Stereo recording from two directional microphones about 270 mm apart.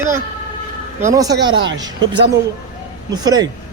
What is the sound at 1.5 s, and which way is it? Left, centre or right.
Speech, right.